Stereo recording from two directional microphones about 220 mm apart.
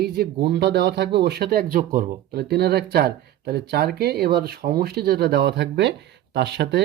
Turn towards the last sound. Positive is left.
turn(degrees=-50)  # may be behind; listen again after turning